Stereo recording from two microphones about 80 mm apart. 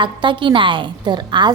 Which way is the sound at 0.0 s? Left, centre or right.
Right.